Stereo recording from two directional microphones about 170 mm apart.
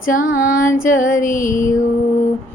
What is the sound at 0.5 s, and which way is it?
Female singing, 55° left (ahead or behind).